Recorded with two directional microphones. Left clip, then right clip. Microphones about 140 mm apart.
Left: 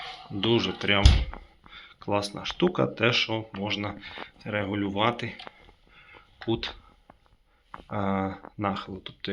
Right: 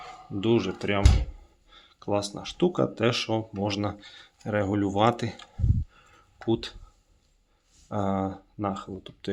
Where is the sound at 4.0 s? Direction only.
20° right (ahead or behind).